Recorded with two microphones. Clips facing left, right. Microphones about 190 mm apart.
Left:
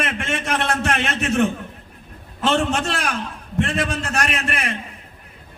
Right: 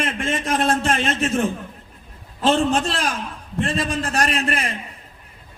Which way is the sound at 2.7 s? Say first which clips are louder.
Right 1 dB; 35° right (ahead or behind).